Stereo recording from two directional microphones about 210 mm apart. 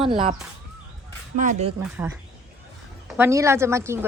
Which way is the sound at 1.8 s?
10° right (ahead or behind).